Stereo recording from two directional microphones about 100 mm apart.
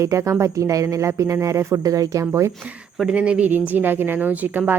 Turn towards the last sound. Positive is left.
turn(degrees=-20)  # may be behind; listen again after turning